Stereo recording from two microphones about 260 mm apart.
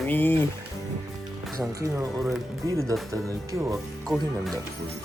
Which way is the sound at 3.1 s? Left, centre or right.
Centre.